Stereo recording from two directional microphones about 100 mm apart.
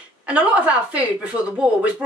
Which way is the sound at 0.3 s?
10° right (ahead or behind).